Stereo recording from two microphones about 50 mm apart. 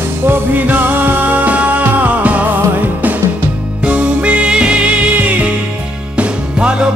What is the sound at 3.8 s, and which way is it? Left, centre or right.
Music, right.